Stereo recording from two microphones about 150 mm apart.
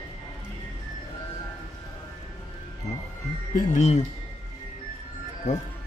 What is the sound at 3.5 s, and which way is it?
Speech, 50° left (ahead or behind).